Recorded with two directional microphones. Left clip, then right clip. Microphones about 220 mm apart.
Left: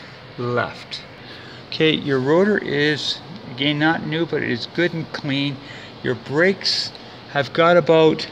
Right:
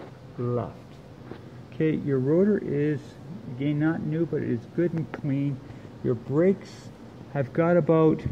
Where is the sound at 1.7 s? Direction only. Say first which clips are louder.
Left 8 dB; 10° left (ahead or behind).